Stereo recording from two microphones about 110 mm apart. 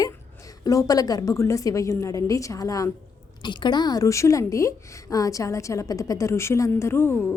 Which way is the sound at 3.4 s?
45° left (ahead or behind).